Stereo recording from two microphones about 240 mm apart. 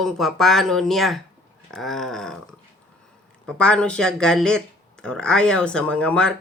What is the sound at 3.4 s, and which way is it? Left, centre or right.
Speech, centre.